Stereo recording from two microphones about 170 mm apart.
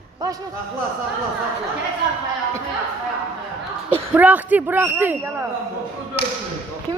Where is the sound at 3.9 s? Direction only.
10° right (ahead or behind).